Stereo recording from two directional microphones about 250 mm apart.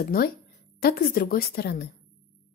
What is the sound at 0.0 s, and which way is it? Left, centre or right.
Speech, left.